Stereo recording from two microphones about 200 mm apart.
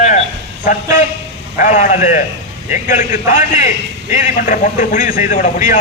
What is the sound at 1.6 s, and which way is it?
A man's voice, 40° left (ahead or behind).